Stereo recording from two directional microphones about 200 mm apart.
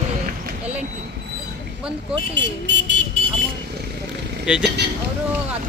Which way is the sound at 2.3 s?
65° right (ahead or behind).